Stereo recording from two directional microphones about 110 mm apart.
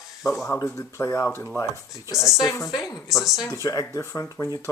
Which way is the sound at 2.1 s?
Centre (ahead or behind).